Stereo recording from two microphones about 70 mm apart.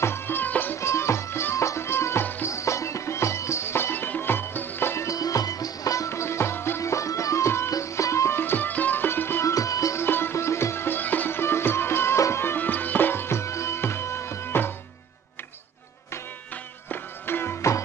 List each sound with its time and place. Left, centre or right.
0.0 s music: left
0.7 s music: left
2.4 s music: left
5.0 s music: left
6.8 s music: left
9.4 s music: left
10.0 s music: left
16.9 s music: left
17.6 s music: left